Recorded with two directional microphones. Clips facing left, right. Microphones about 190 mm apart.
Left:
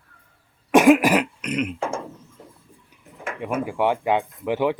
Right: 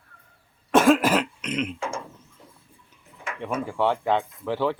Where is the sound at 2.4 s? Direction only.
40° left (ahead or behind).